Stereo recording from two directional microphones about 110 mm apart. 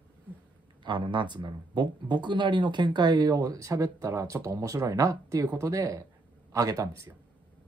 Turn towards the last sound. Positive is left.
turn(degrees=-30)  # may be behind; listen again after turning